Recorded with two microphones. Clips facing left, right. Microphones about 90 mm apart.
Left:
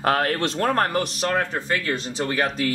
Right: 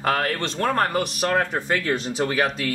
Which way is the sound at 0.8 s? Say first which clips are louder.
Even; 5° right (ahead or behind).